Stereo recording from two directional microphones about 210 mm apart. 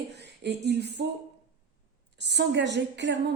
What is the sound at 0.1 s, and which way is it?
Speech, 55° right (ahead or behind).